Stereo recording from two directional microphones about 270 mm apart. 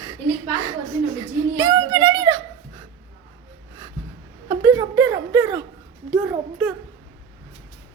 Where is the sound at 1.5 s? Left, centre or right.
Centre.